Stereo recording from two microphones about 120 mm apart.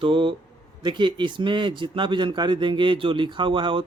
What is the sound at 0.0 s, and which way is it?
Speech, 45° right (ahead or behind).